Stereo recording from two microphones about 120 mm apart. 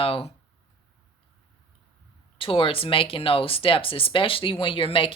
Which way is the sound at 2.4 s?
50° left (ahead or behind).